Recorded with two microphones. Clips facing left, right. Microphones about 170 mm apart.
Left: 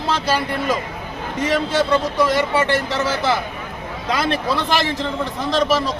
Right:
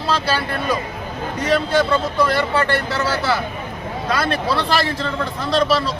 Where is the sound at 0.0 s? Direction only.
15° left (ahead or behind).